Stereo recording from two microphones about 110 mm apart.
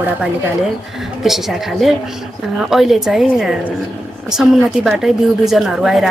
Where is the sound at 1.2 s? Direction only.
5° right (ahead or behind).